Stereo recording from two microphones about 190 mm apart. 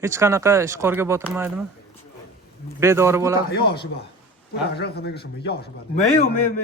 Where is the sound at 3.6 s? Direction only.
55° left (ahead or behind).